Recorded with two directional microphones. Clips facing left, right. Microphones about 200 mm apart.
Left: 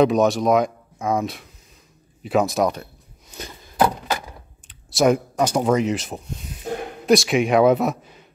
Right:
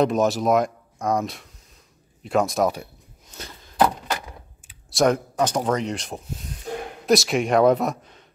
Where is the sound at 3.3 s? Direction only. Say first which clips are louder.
Even; 15° left (ahead or behind).